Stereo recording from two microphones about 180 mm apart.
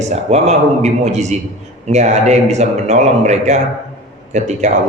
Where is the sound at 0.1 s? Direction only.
35° right (ahead or behind).